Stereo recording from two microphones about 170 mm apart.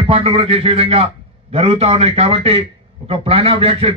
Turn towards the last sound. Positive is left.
turn(degrees=-35)  # may be behind; listen again after turning